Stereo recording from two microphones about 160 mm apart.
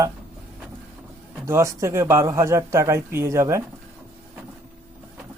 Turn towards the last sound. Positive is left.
turn(degrees=-20)  # may be behind; listen again after turning